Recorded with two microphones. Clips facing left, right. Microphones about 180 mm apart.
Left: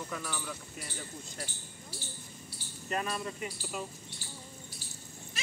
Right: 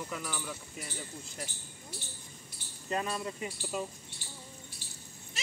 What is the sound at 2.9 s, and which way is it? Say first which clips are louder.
Speech: right 1 dB; 20° right (ahead or behind).